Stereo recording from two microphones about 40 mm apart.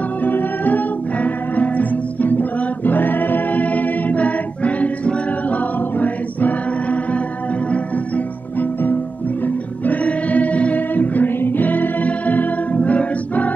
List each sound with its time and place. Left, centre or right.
0.2 s music: left
9.8 s choir: left